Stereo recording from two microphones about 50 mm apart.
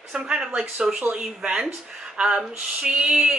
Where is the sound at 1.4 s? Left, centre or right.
Right.